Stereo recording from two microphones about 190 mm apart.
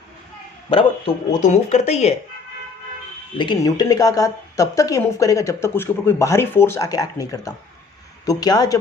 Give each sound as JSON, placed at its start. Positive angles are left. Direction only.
{"t": 0.7, "sound": "a man's voice", "side_deg": 30}
{"t": 1.4, "sound": "speech", "side_deg": 40}
{"t": 3.3, "sound": "a man's voice", "side_deg": 25}